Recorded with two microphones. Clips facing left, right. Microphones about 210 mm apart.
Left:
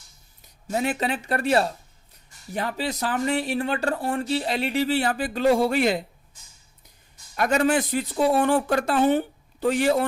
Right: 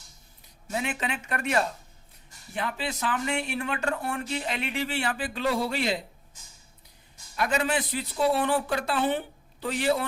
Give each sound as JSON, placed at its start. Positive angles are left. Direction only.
{"t": 0.7, "sound": "speech", "side_deg": 40}
{"t": 7.3, "sound": "speech", "side_deg": 45}